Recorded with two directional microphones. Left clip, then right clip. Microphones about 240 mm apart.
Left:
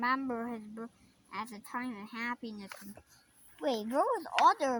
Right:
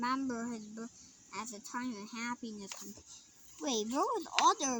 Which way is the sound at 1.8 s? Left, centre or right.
Centre.